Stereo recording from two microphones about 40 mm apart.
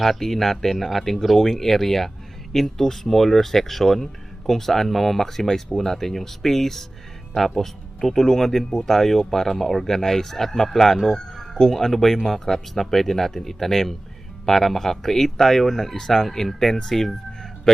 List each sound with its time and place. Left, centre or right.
0.0 s speech: centre
8.7 s speech: centre
9.0 s speech: centre